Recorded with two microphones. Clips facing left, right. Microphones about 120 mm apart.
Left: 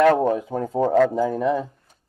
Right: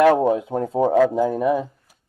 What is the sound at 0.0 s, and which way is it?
Speech, 15° right (ahead or behind).